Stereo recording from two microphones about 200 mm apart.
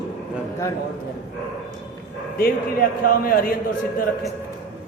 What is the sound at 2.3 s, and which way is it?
A woman's voice, 45° left (ahead or behind).